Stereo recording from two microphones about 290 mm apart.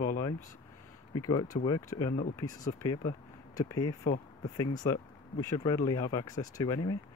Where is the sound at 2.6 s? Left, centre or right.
Left.